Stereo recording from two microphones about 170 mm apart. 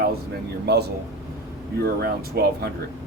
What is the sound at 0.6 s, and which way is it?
Speech, 70° right (ahead or behind).